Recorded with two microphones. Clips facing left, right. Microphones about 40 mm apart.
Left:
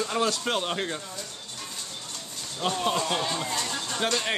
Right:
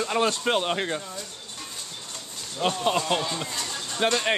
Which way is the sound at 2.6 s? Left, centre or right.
Centre.